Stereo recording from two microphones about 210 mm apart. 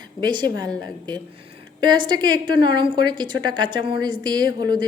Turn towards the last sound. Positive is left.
turn(degrees=-20)  # may be behind; listen again after turning